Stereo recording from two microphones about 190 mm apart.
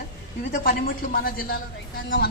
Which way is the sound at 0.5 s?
50° left (ahead or behind).